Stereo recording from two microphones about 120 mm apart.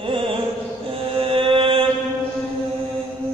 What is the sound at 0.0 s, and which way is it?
Carnatic music, 45° right (ahead or behind).